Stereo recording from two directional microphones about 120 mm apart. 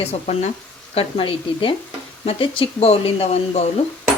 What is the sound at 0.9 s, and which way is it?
A woman's voice, 50° left (ahead or behind).